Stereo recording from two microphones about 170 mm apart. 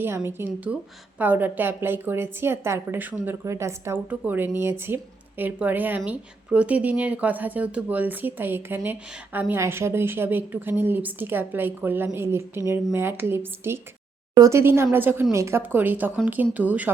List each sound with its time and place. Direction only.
0.0 s a woman's voice: 15° right (ahead or behind)